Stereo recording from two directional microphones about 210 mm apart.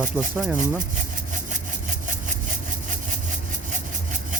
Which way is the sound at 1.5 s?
35° right (ahead or behind).